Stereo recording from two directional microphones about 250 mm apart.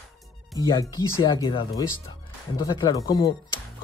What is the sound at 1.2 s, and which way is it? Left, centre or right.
Speech, centre.